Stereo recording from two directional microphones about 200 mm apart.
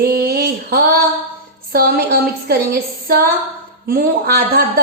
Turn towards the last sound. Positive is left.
turn(degrees=-50)  # may be behind; listen again after turning